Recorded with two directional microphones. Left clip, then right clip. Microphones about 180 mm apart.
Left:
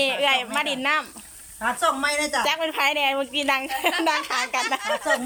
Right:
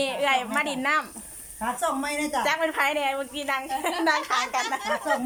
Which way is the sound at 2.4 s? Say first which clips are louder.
Left 1 dB; 10° left (ahead or behind).